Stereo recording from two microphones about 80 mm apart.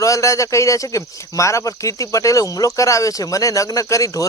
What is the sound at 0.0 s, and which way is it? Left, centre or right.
Speech, left.